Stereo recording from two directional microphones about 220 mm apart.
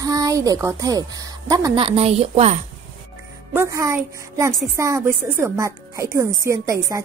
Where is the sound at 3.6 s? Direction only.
10° right (ahead or behind).